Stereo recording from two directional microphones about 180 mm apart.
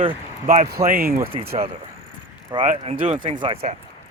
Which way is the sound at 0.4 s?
50° right (ahead or behind).